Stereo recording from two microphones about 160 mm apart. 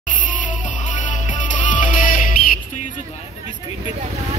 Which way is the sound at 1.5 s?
50° left (ahead or behind).